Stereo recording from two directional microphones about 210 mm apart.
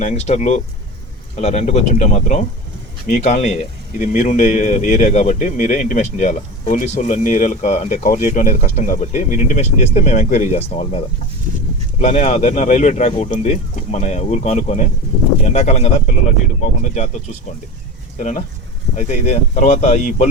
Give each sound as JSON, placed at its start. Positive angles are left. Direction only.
{"t": 0.0, "sound": "speech", "side_deg": 30}
{"t": 18.2, "sound": "speech", "side_deg": 35}